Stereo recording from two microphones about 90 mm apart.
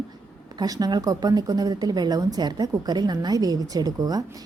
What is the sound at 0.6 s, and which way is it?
A woman's voice, 50° right (ahead or behind).